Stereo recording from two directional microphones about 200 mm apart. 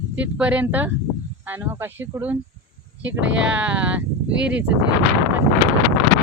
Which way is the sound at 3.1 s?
65° right (ahead or behind).